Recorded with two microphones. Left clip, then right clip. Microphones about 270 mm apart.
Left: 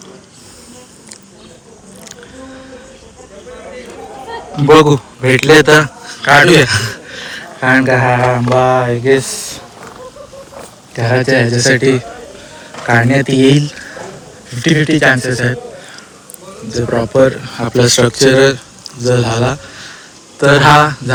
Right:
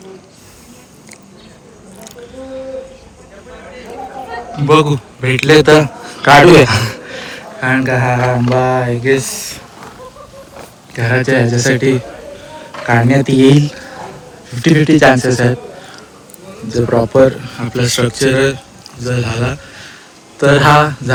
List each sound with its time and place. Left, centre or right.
4.6 s speech: centre
6.2 s a man's voice: right
7.6 s a man's voice: centre
10.9 s a man's voice: centre
14.5 s speech: centre
16.7 s a man's voice: centre